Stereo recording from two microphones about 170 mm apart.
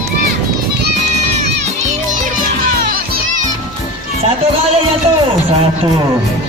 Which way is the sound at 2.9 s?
60° right (ahead or behind).